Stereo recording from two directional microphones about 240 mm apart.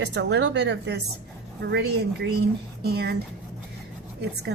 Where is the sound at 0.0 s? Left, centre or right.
Right.